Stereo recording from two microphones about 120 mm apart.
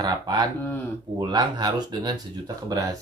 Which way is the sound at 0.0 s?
35° right (ahead or behind).